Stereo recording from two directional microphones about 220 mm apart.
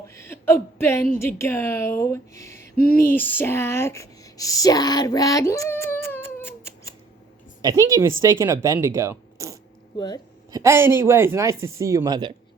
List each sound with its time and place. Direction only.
0.1 s speech: 10° left (ahead or behind)
2.7 s a sound: 40° left (ahead or behind)
3.0 s speech: 10° left (ahead or behind)
7.6 s speech: 15° right (ahead or behind)